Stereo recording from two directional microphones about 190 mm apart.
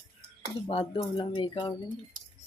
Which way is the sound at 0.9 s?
25° left (ahead or behind).